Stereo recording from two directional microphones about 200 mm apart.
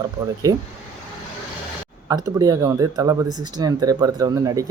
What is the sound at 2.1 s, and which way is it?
Speech, 15° right (ahead or behind).